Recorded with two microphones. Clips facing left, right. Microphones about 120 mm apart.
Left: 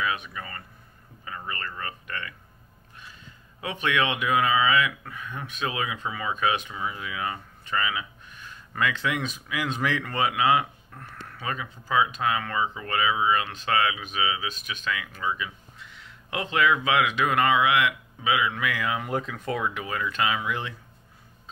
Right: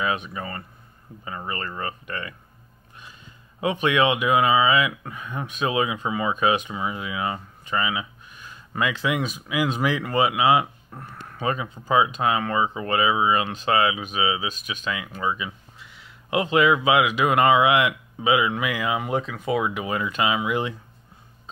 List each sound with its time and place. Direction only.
0.0 s speech: 25° right (ahead or behind)
3.6 s speech: 20° right (ahead or behind); by 19.6 s centre (ahead or behind)
19.6 s speech: 15° right (ahead or behind)